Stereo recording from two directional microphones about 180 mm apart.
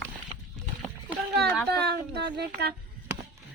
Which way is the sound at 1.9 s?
65° right (ahead or behind).